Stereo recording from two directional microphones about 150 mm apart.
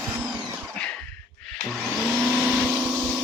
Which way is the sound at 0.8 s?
10° left (ahead or behind).